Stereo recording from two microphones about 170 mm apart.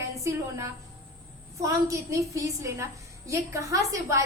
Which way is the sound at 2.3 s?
15° right (ahead or behind).